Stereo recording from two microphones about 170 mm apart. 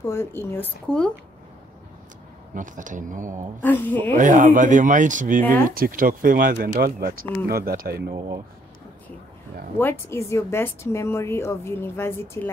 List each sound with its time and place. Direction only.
0.0 s a woman's voice: 15° left (ahead or behind)
2.5 s speech: 50° right (ahead or behind)
3.6 s a woman's voice: 10° left (ahead or behind)
4.2 s speech: 50° right (ahead or behind); by 8.1 s 65° right (ahead or behind)
9.8 s a woman's voice: 15° left (ahead or behind)